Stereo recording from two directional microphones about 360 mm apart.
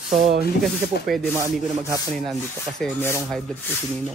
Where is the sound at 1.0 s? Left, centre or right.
Centre.